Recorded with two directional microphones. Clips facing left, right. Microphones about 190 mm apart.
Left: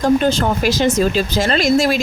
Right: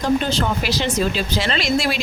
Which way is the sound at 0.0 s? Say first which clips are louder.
Left 5 dB; 45° left (ahead or behind).